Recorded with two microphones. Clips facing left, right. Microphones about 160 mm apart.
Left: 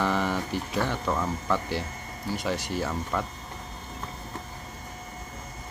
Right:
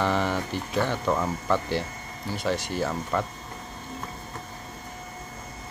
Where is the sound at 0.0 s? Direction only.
5° left (ahead or behind).